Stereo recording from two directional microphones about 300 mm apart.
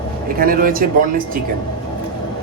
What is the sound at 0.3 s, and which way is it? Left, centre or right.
A man's voice, right.